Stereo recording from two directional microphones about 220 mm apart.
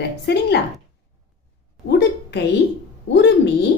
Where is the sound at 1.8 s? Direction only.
50° left (ahead or behind).